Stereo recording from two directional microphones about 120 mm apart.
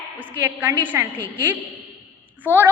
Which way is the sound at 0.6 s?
15° right (ahead or behind).